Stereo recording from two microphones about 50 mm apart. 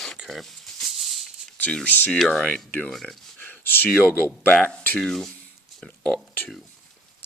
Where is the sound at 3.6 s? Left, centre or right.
Left.